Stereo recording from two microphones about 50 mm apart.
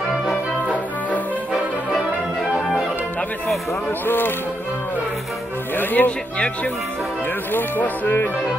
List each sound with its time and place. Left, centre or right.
4.0 s speech: left
5.8 s speech: left
6.3 s speech: left
7.5 s speech: left